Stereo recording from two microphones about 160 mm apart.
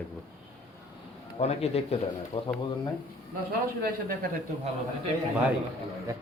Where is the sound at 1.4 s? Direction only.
40° left (ahead or behind).